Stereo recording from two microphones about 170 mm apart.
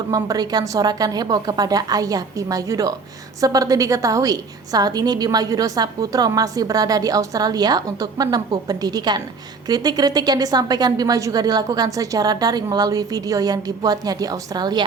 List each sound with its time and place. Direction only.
0.1 s a woman's voice: 20° right (ahead or behind)